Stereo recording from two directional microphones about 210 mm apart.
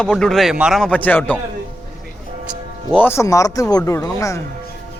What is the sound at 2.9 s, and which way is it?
Speech, 10° left (ahead or behind).